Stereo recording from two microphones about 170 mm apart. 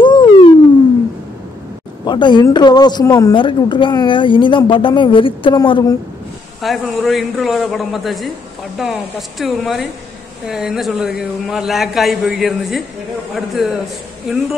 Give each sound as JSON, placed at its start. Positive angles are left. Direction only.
{"t": 0.0, "sound": "a sound", "side_deg": 25}
{"t": 2.0, "sound": "a woman's voice", "side_deg": 25}
{"t": 6.6, "sound": "a man's voice", "side_deg": 0}